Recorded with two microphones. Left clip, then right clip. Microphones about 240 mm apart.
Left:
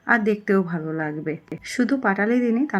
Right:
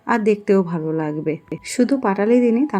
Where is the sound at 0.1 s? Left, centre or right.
Centre.